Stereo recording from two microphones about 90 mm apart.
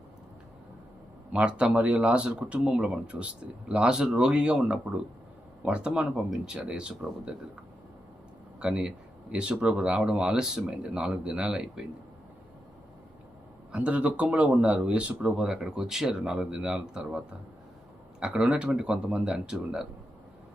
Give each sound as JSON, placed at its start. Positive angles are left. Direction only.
{"t": 1.3, "sound": "speech", "side_deg": -10}
{"t": 8.5, "sound": "speech", "side_deg": -10}
{"t": 13.7, "sound": "speech", "side_deg": -15}